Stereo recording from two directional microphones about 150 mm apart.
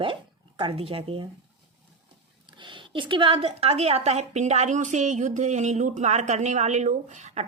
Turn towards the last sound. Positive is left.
turn(degrees=-50)  # may be behind; listen again after turning